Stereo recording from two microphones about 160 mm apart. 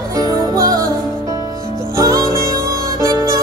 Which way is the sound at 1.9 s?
20° right (ahead or behind).